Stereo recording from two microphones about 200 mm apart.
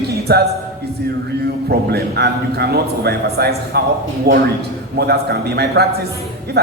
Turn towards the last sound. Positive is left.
turn(degrees=-55)  # may be behind; listen again after turning